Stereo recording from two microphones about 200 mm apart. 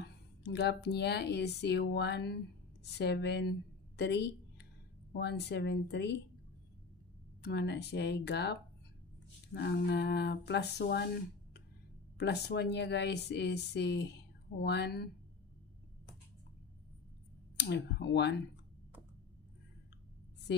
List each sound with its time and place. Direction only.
0.0 s speech: 55° left (ahead or behind)
7.4 s speech: 55° left (ahead or behind)
12.2 s speech: 55° left (ahead or behind)
17.6 s speech: 55° left (ahead or behind)